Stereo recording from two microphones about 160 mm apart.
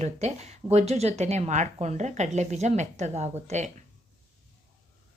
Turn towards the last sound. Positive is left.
turn(degrees=-45)  # may be behind; listen again after turning